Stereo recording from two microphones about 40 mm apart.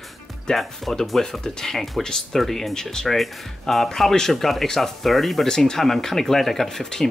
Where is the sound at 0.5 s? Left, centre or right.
Centre.